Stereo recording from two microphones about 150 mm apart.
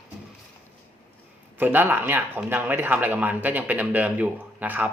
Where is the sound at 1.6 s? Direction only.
15° right (ahead or behind).